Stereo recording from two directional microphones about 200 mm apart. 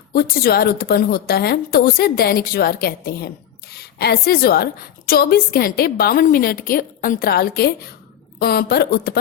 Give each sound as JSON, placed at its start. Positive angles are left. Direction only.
{"t": 0.1, "sound": "a woman's voice", "side_deg": 50}